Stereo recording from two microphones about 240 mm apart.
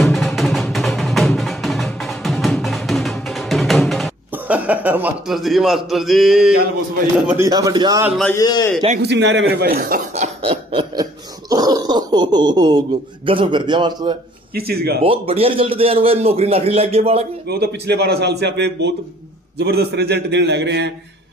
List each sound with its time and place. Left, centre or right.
0.0 s music: centre
7.2 s a man's voice: centre
8.2 s a man's voice: centre
9.0 s a man's voice: right; by 14.1 s centre
14.7 s speech: right
15.0 s speech: right
17.5 s a man's voice: right